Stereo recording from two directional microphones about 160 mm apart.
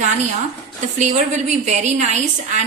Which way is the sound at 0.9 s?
45° right (ahead or behind).